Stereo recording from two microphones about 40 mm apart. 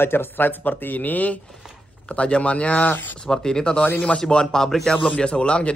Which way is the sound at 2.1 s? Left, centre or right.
Left.